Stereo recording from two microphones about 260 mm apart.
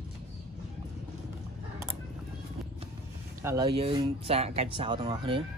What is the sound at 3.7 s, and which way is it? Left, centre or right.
Speech, right.